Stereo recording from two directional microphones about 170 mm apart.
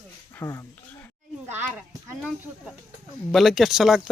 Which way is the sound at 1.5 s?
10° right (ahead or behind).